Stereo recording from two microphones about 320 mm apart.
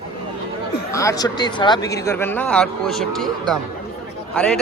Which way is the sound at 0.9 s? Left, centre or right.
Centre.